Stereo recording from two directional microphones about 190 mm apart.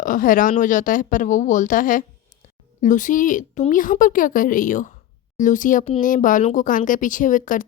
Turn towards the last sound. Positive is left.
turn(degrees=45)  # may be behind; listen again after turning